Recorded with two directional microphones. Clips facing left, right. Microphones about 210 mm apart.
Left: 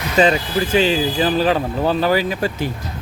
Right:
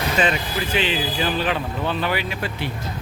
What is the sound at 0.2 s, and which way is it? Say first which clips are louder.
Speech: left 9 dB; 35° left (ahead or behind).